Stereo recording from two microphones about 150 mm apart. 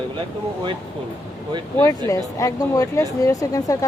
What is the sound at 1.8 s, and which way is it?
Speech, 25° left (ahead or behind).